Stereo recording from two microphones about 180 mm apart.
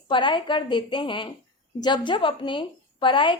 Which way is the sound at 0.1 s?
25° left (ahead or behind).